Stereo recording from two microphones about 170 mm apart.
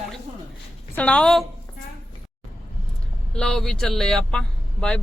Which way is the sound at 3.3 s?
5° left (ahead or behind).